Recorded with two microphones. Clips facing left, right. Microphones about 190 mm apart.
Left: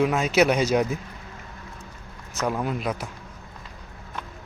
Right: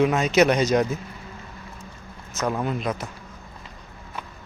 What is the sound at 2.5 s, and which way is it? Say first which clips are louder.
Speech: right 1 dB; 5° left (ahead or behind).